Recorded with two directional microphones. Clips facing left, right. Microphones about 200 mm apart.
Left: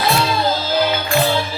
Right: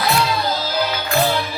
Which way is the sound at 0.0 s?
25° left (ahead or behind).